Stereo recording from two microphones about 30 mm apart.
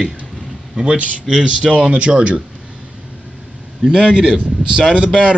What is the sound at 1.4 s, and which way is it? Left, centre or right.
Speech, right.